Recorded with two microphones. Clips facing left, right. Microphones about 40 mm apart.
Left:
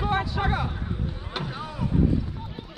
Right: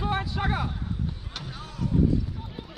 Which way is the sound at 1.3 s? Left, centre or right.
Left.